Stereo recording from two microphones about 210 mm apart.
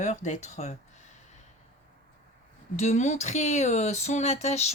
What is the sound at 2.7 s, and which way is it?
A woman's voice, 35° left (ahead or behind).